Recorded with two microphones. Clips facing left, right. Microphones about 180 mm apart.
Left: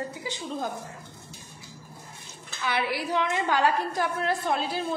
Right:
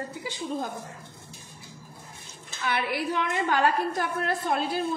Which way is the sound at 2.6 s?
55° right (ahead or behind).